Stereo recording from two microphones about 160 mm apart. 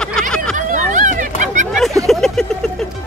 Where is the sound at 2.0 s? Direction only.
Centre (ahead or behind).